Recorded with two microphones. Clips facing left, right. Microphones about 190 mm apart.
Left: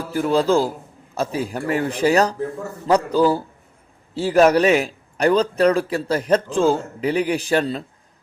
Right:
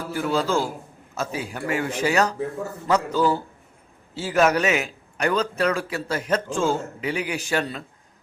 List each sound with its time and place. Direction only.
0.1 s a man's voice: 35° left (ahead or behind)